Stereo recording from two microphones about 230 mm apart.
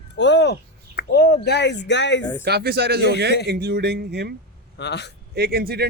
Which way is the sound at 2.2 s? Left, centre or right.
Centre.